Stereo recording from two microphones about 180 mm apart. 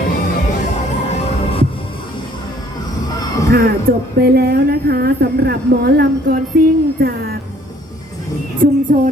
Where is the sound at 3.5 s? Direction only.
60° right (ahead or behind).